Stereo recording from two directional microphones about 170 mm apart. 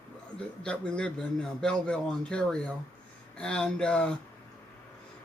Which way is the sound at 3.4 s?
5° left (ahead or behind).